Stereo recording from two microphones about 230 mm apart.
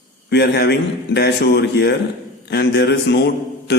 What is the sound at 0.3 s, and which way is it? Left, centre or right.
Speech, left.